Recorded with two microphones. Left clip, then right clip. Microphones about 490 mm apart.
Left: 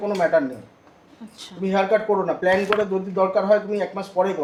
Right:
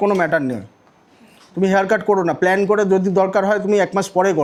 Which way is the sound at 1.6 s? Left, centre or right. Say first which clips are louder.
Right 4 dB; right.